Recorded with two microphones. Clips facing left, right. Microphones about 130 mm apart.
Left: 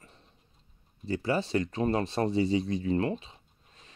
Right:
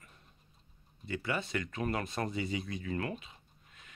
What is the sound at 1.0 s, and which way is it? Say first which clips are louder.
Speech: left 7 dB; 35° left (ahead or behind).